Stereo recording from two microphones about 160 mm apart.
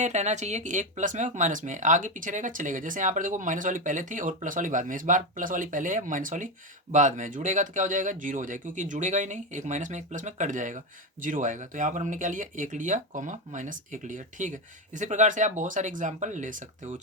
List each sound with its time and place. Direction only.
0.0 s speech: 45° right (ahead or behind)